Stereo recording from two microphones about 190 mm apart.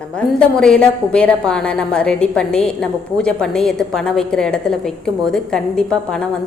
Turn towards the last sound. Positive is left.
turn(degrees=5)  # may be behind; listen again after turning